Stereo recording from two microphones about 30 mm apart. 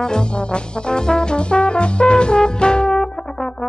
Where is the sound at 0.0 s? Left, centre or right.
Left.